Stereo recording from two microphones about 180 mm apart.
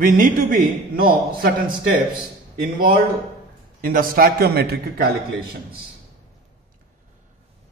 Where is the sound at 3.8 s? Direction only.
55° right (ahead or behind).